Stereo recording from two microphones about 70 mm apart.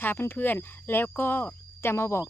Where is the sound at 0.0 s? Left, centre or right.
Left.